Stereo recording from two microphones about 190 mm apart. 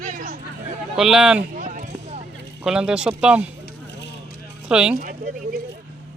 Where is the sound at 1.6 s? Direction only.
40° right (ahead or behind).